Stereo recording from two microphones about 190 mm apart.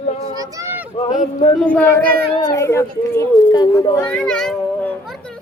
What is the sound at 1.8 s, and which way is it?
Speech, 10° left (ahead or behind).